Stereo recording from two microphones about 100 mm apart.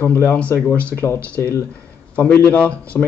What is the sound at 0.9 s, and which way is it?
A man's voice, 25° left (ahead or behind).